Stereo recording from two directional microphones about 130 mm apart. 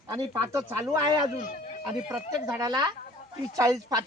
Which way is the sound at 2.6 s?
30° right (ahead or behind).